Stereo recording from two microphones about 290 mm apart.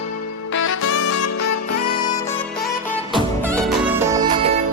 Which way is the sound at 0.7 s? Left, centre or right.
Left.